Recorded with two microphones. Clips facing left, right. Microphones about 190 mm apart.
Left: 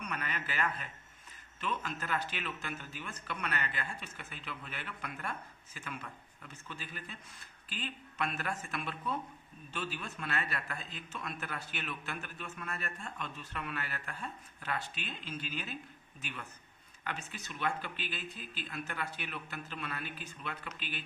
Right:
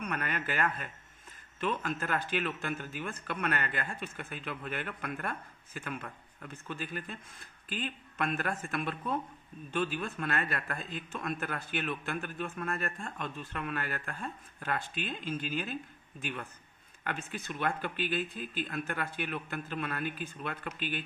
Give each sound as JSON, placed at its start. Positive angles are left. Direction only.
{"t": 0.0, "sound": "a man's voice", "side_deg": -50}